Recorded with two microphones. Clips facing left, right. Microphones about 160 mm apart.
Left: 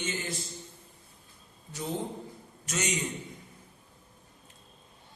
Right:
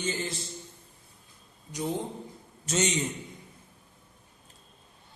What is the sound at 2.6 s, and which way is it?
Speech, 25° right (ahead or behind).